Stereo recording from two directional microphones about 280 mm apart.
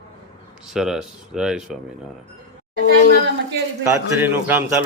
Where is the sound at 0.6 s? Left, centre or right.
Centre.